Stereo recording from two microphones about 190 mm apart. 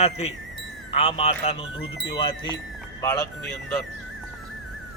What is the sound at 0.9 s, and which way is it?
A man's voice, 30° left (ahead or behind).